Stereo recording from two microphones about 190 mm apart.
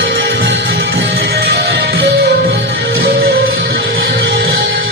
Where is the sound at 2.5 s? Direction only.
65° right (ahead or behind).